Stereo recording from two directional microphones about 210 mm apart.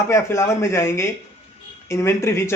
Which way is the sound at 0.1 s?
15° left (ahead or behind).